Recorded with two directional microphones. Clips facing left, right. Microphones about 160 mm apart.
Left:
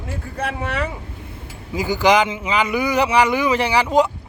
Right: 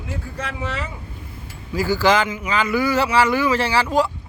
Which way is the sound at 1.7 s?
20° left (ahead or behind).